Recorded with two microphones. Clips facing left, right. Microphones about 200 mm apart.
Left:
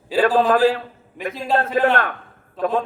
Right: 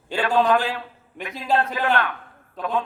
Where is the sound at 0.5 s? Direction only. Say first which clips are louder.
Left 7 dB; 40° left (ahead or behind).